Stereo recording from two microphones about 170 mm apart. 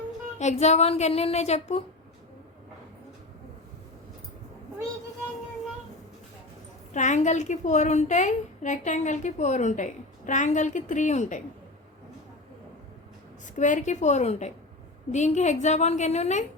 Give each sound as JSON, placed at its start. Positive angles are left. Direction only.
{"t": 0.3, "sound": "a woman's voice", "side_deg": 40}
{"t": 6.9, "sound": "a woman's voice", "side_deg": 45}
{"t": 13.6, "sound": "a woman's voice", "side_deg": 45}